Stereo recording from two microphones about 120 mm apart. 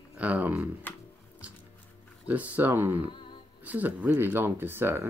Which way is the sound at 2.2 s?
15° right (ahead or behind).